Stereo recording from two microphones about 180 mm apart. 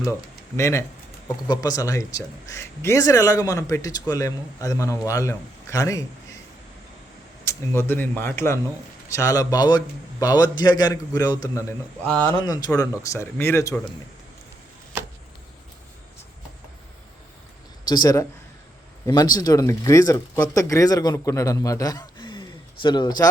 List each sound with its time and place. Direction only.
0.5 s speech: 15° left (ahead or behind)
7.4 s speech: 15° left (ahead or behind)
12.0 s speech: 5° left (ahead or behind)
12.3 s speech: 20° left (ahead or behind)
17.8 s speech: 25° left (ahead or behind)